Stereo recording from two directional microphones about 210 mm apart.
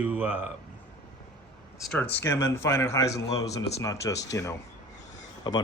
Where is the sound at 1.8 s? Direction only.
5° left (ahead or behind).